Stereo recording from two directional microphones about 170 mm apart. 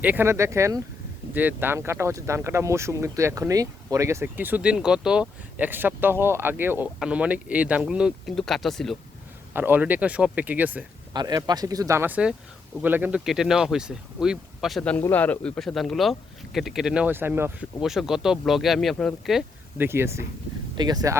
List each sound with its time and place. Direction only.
0.0 s speech: 10° right (ahead or behind)
9.5 s speech: 10° right (ahead or behind)
11.1 s speech: 25° right (ahead or behind)
17.7 s speech: centre (ahead or behind)
19.8 s speech: 15° right (ahead or behind)